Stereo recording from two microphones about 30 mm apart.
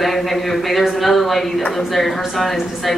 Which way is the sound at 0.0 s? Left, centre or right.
Centre.